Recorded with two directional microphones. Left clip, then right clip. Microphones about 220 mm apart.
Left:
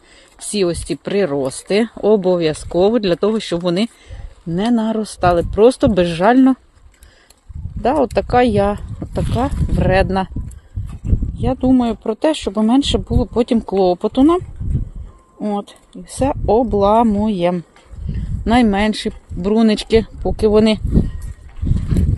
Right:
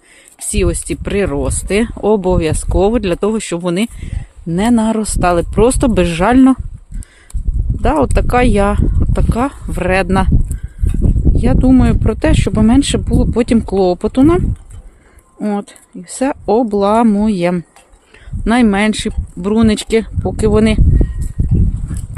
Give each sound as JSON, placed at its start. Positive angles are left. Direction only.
{"t": 0.5, "sound": "speech", "side_deg": -20}
{"t": 7.8, "sound": "speech", "side_deg": -25}
{"t": 11.3, "sound": "speech", "side_deg": -35}